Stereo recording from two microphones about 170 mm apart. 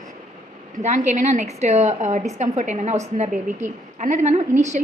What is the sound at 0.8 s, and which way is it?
A woman's voice, 45° right (ahead or behind).